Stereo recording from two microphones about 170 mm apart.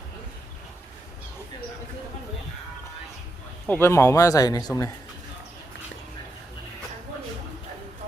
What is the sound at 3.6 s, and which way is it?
Speech, 15° left (ahead or behind).